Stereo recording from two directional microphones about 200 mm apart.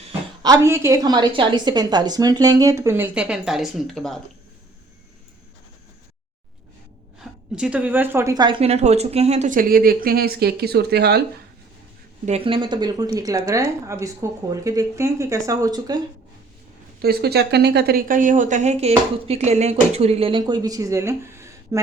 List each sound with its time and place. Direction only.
0.0 s a woman's voice: 25° right (ahead or behind); by 4.2 s centre (ahead or behind)
7.2 s speech: 5° right (ahead or behind); by 11.2 s 55° right (ahead or behind)
12.2 s a woman's voice: 30° right (ahead or behind)
17.0 s speech: 50° right (ahead or behind); by 21.8 s 15° right (ahead or behind)